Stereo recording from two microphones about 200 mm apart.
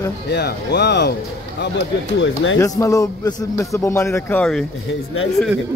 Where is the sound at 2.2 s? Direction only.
70° left (ahead or behind).